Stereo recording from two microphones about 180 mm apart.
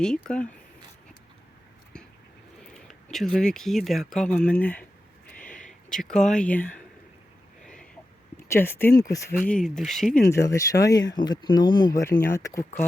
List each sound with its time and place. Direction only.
0.0 s speech: 5° left (ahead or behind)
2.7 s speech: centre (ahead or behind)
5.4 s a sound: 45° left (ahead or behind)
5.9 s speech: 5° left (ahead or behind)
7.6 s a sound: 5° left (ahead or behind)
8.4 s speech: 15° left (ahead or behind)
9.5 s speech: 5° left (ahead or behind)
10.2 s speech: 15° left (ahead or behind)